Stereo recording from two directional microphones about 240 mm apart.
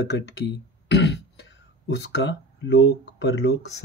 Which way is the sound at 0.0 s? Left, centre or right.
Left.